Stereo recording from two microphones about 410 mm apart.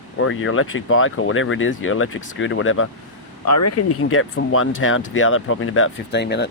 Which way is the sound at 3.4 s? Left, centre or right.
Left.